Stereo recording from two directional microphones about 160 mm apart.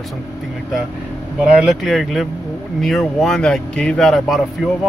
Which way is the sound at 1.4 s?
5° right (ahead or behind).